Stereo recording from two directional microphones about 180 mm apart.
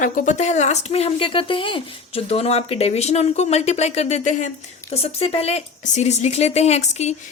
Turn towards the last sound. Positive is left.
turn(degrees=35)  # may be behind; listen again after turning